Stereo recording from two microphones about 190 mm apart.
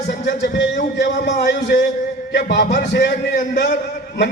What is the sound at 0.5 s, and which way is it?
A man's voice, 70° left (ahead or behind).